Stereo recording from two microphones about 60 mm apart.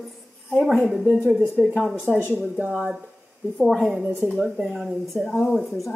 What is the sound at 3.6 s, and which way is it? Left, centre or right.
A woman's voice, centre.